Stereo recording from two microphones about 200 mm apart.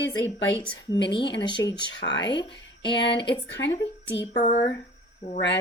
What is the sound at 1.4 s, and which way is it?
Speech, 20° left (ahead or behind).